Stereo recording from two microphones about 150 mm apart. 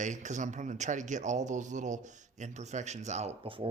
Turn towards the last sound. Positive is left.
turn(degrees=-40)  # may be behind; listen again after turning